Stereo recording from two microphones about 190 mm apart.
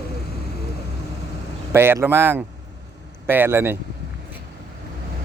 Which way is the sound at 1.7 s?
10° right (ahead or behind).